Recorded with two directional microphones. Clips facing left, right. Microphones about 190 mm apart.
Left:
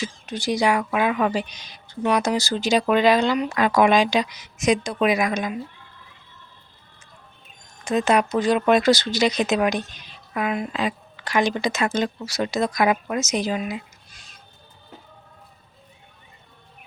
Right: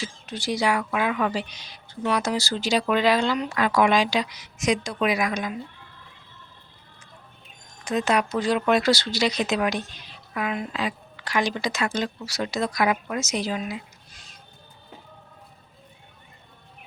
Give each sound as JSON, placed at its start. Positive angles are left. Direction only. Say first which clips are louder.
{"t": 0.0, "sound": "a woman's voice", "louder": "left 4 dB", "side_deg": 15}
{"t": 7.9, "sound": "a woman's voice", "louder": "left 3 dB", "side_deg": 25}